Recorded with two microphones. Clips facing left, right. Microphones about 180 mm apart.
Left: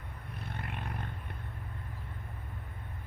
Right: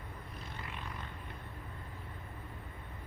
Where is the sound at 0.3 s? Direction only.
60° left (ahead or behind).